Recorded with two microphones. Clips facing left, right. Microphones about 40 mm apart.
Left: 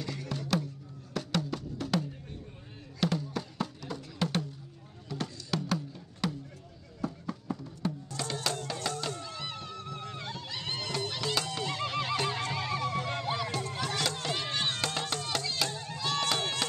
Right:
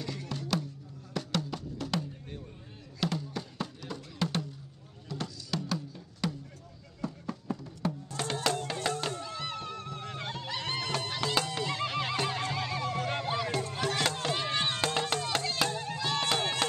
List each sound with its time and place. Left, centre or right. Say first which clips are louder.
0.0 s music: left 1 dB; centre
8.1 s music: right 5 dB; right
8.6 s music: right 2 dB; right
9.1 s music: right 2 dB; centre
9.5 s a sound: right 2 dB; right
10.0 s music: right 2 dB; right
11.6 s neigh: right 1 dB; centre
12.5 s music: left 1 dB; centre
13.2 s run: right 1 dB; centre
13.6 s chop: right 2 dB; centre
15.0 s music: right 3 dB; right
16.0 s chop: left 1 dB; centre